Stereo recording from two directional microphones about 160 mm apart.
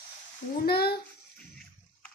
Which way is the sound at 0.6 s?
80° left.